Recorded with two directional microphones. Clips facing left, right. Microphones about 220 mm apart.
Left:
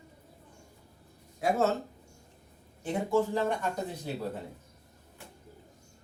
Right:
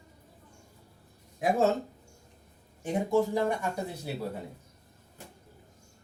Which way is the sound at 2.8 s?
15° right (ahead or behind).